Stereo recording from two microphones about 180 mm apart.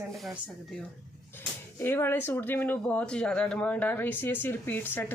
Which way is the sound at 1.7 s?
10° left (ahead or behind).